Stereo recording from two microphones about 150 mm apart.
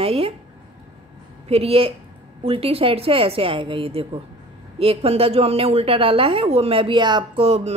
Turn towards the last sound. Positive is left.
turn(degrees=-45)  # may be behind; listen again after turning